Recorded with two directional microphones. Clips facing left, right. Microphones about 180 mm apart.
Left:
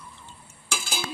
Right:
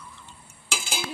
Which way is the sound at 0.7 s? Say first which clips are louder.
Even; 20° right (ahead or behind).